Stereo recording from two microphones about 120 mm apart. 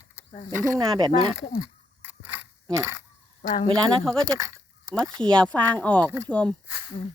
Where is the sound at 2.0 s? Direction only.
20° right (ahead or behind).